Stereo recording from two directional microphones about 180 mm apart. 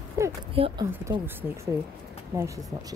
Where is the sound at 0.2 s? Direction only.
15° right (ahead or behind).